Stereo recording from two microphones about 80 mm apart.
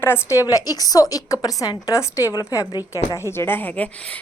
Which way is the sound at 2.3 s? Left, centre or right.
Left.